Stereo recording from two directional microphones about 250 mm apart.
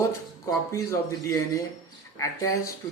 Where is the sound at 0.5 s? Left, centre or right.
Centre.